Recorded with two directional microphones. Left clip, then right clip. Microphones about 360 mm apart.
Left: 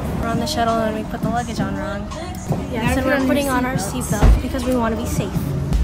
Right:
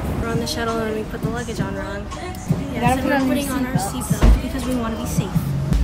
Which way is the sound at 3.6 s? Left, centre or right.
Centre.